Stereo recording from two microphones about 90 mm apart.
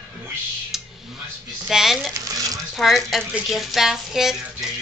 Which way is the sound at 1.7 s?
5° right (ahead or behind).